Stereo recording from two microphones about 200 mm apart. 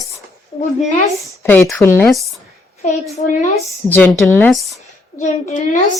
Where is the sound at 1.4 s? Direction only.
10° left (ahead or behind).